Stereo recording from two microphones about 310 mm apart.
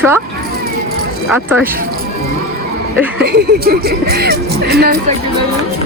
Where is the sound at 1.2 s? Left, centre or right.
Centre.